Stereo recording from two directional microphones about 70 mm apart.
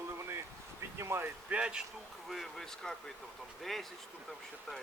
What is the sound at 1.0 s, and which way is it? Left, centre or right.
Speech, right.